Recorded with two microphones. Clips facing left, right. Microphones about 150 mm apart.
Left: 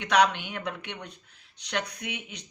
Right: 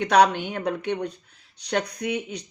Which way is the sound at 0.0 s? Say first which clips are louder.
Right 5 dB; 40° right (ahead or behind).